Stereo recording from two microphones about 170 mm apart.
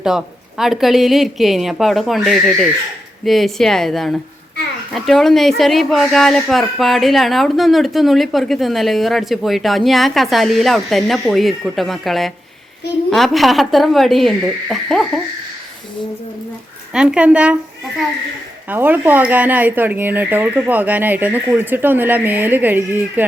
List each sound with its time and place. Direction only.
0.0 s speech: centre (ahead or behind)
16.9 s speech: 5° right (ahead or behind)
18.7 s speech: 10° right (ahead or behind)